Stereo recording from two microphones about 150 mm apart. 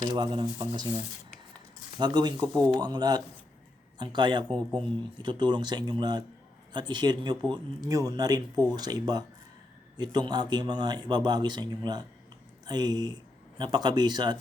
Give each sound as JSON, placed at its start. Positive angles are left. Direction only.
{"t": 0.0, "sound": "speech", "side_deg": -30}